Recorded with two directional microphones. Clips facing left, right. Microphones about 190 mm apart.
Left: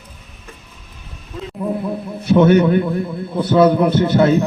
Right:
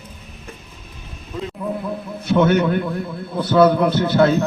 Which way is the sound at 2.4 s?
25° left (ahead or behind).